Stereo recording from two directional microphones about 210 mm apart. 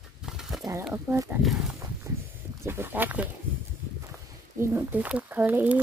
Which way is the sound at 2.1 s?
15° right (ahead or behind).